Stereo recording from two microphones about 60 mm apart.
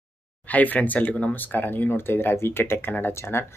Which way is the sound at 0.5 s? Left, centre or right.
Left.